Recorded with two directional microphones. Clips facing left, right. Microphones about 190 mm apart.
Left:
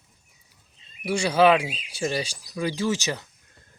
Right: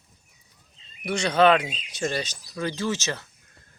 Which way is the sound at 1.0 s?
10° left (ahead or behind).